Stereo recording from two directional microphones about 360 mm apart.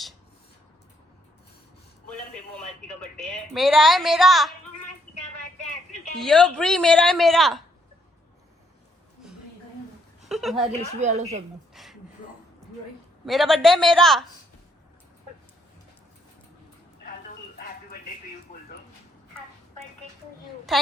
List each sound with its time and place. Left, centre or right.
3.2 s a woman's voice: centre
6.1 s a woman's voice: centre
10.2 s chuckle: centre
11.0 s a woman's voice: centre
11.7 s a sound: centre
13.2 s a woman's voice: centre